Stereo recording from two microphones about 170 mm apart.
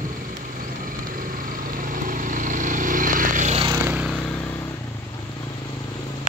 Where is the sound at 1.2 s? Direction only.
55° right (ahead or behind).